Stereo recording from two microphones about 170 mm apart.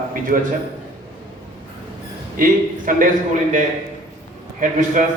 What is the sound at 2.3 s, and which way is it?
Speech, 55° right (ahead or behind).